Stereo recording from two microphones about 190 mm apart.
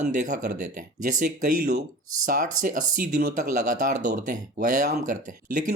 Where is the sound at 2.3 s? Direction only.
45° right (ahead or behind).